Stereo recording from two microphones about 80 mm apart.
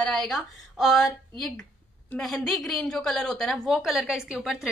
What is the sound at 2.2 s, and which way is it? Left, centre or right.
A woman's voice, centre.